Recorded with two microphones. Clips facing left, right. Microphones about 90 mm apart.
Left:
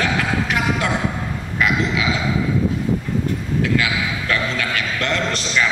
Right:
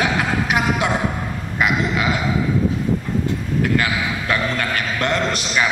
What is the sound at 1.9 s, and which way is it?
Speech, 55° right (ahead or behind).